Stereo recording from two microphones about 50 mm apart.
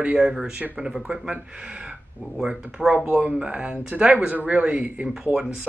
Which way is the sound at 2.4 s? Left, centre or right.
Centre.